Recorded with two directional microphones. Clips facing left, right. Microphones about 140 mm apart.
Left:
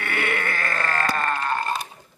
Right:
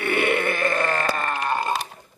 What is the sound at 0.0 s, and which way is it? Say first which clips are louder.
Sheep: right 5 dB; 20° right (ahead or behind).